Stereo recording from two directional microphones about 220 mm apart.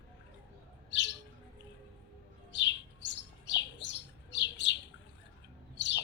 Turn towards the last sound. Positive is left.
turn(degrees=55)  # may be behind; listen again after turning